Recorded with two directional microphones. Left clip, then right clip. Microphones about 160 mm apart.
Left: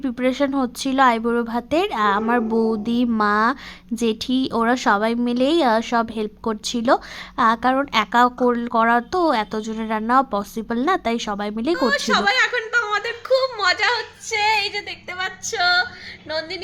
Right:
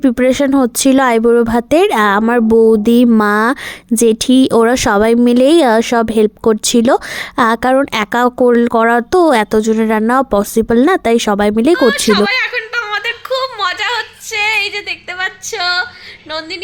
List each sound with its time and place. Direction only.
0.2 s speech: 50° right (ahead or behind)
12.0 s a sound: 10° left (ahead or behind)
14.3 s female singing: 20° right (ahead or behind)